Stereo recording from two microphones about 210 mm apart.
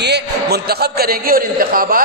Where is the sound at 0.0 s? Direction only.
50° right (ahead or behind).